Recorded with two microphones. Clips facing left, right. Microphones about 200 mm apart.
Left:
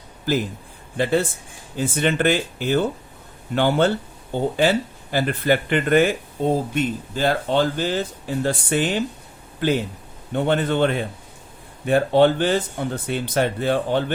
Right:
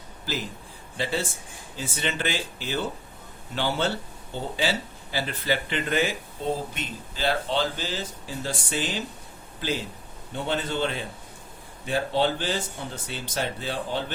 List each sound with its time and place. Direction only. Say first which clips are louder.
0.3 s speech: left 10 dB; 50° left (ahead or behind)